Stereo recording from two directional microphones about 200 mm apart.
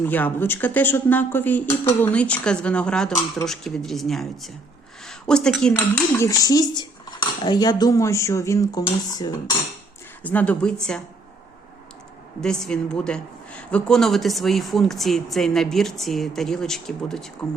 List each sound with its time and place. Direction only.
0.0 s speech: 10° left (ahead or behind)
6.1 s speech: 15° left (ahead or behind)
10.2 s speech: 5° left (ahead or behind)
12.4 s speech: 5° left (ahead or behind)